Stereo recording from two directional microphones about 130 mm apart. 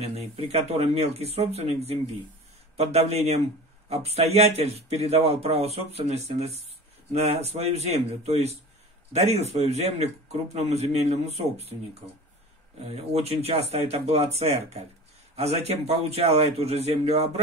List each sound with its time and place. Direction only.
0.0 s speech: 50° right (ahead or behind)